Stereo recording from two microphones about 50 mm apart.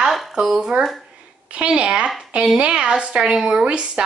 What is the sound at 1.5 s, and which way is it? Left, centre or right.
Speech, right.